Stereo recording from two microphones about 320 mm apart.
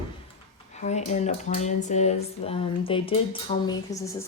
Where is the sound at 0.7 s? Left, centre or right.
Left.